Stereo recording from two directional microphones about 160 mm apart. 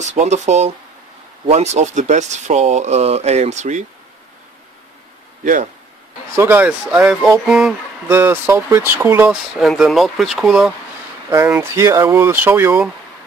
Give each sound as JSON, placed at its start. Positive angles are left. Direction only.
{"t": 0.0, "sound": "speech", "side_deg": -45}
{"t": 5.4, "sound": "speech", "side_deg": -55}
{"t": 6.3, "sound": "speech", "side_deg": -10}
{"t": 8.1, "sound": "speech", "side_deg": -15}
{"t": 11.2, "sound": "speech", "side_deg": -15}